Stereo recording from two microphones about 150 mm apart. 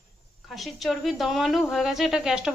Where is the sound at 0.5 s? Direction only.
Centre (ahead or behind).